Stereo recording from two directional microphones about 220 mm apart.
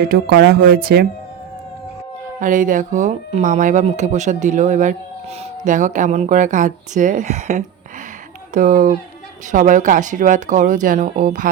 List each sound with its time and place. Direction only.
0.0 s speech: 45° right (ahead or behind)
2.4 s speech: 35° right (ahead or behind)